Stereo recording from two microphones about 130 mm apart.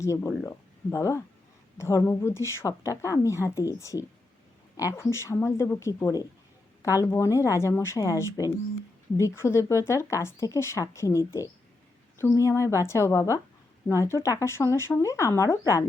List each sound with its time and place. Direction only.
0.0 s speech: 20° left (ahead or behind)